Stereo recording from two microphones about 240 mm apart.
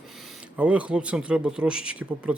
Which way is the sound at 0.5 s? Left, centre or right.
Centre.